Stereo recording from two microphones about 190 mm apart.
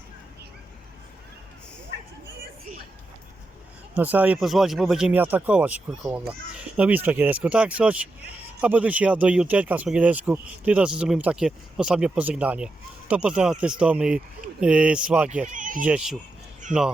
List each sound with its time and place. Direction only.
3.9 s speech: 10° right (ahead or behind)
15.4 s speech: 45° right (ahead or behind)
15.8 s speech: 5° right (ahead or behind)